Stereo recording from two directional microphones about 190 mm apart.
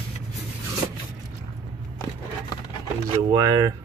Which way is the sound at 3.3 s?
20° right (ahead or behind).